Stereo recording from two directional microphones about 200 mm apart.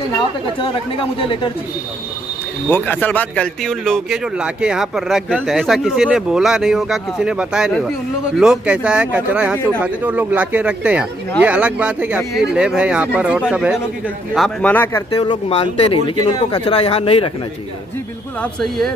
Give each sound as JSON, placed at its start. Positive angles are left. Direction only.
{"t": 0.6, "sound": "speech", "side_deg": 25}
{"t": 2.7, "sound": "speech", "side_deg": 10}
{"t": 18.4, "sound": "speech", "side_deg": 0}